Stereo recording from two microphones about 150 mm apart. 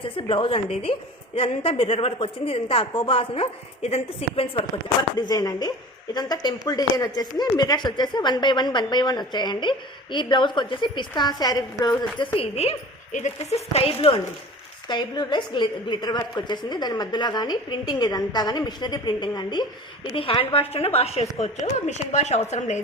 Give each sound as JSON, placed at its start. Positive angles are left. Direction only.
{"t": 0.0, "sound": "a woman's voice", "side_deg": 35}
{"t": 12.4, "sound": "a woman's voice", "side_deg": 45}
{"t": 14.8, "sound": "a woman's voice", "side_deg": 30}